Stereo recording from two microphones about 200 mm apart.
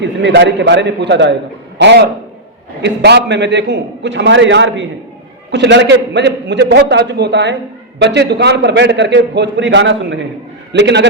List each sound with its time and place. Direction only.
0.0 s a man's voice: 60° right (ahead or behind)